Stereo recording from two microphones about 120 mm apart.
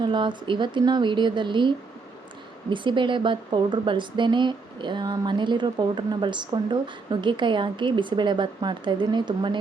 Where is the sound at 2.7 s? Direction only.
40° right (ahead or behind).